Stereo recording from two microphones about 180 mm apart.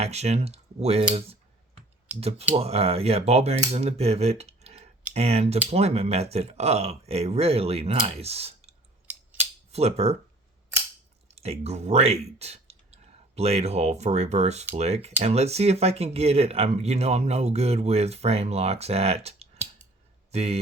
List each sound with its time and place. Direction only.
0.0 s speech: 35° right (ahead or behind)
2.2 s speech: 35° right (ahead or behind)
9.0 s scissors: 10° right (ahead or behind)
9.7 s speech: 35° right (ahead or behind)
11.3 s speech: 35° right (ahead or behind)